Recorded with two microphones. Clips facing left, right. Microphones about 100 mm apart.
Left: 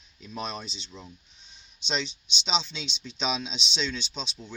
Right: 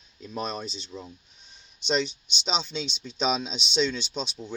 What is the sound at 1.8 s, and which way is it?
Speech, 50° right (ahead or behind).